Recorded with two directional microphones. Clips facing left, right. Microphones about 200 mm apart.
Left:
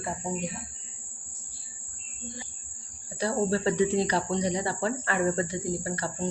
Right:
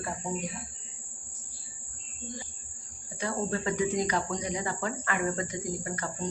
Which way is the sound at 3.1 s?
35° left (ahead or behind).